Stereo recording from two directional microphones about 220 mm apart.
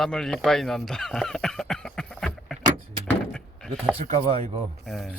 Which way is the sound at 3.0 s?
5° left (ahead or behind).